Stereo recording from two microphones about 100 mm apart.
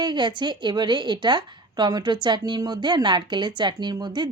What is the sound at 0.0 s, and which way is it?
Speech, 50° right (ahead or behind).